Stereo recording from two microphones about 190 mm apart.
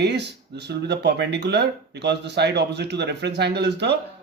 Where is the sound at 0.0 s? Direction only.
60° right (ahead or behind).